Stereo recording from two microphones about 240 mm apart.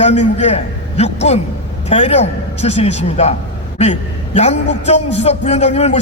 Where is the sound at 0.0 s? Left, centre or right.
Left.